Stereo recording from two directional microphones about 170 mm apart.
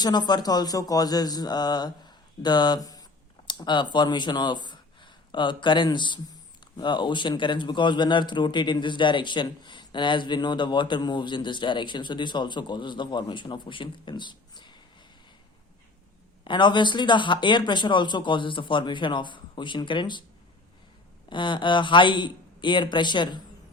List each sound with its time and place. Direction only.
0.0 s speech: 25° left (ahead or behind)
16.4 s speech: 25° left (ahead or behind)
21.2 s speech: 30° left (ahead or behind)